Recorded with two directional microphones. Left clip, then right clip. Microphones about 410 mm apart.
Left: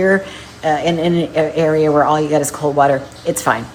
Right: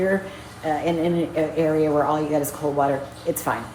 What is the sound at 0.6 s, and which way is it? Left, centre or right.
A woman's voice, left.